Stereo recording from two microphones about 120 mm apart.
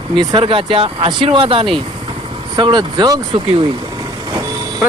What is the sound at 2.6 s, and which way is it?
Speech, 35° right (ahead or behind).